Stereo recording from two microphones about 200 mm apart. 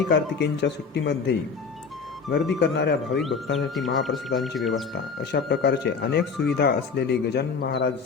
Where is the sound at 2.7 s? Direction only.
55° left (ahead or behind).